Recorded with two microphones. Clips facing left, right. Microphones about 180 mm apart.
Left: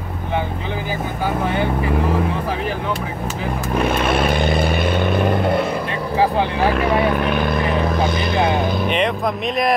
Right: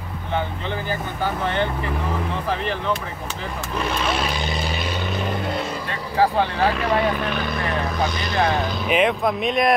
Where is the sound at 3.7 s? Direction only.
55° left (ahead or behind).